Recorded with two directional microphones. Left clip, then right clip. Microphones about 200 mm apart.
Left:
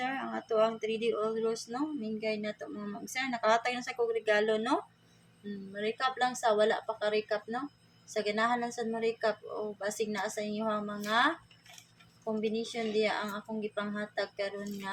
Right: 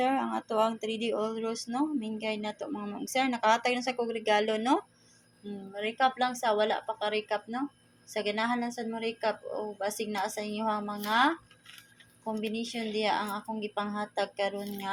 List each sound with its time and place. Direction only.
0.0 s speech: 25° right (ahead or behind)
12.4 s speech: 25° right (ahead or behind)